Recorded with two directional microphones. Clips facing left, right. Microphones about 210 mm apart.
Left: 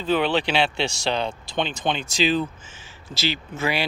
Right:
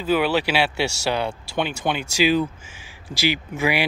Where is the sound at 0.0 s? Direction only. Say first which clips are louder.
Right 1 dB; 10° right (ahead or behind).